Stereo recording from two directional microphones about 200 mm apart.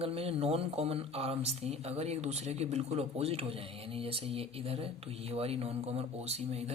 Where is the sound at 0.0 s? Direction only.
30° right (ahead or behind).